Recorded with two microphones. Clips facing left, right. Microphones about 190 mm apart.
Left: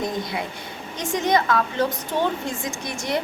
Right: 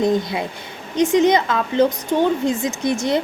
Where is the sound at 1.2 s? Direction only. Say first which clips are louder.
Right 4 dB; 20° right (ahead or behind).